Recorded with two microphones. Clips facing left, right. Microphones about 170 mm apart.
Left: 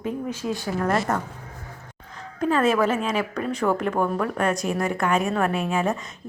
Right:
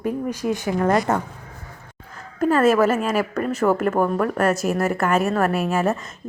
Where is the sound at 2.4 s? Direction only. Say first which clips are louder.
Right 4 dB; 5° right (ahead or behind).